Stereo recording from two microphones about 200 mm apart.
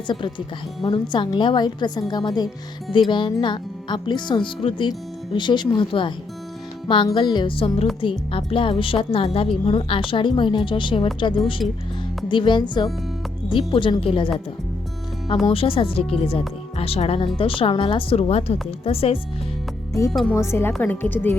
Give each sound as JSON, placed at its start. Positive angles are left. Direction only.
{"t": 0.1, "sound": "a woman's voice", "side_deg": 25}
{"t": 15.4, "sound": "a woman's voice", "side_deg": 25}
{"t": 20.1, "sound": "speech", "side_deg": 0}
{"t": 20.3, "sound": "a woman's voice", "side_deg": 15}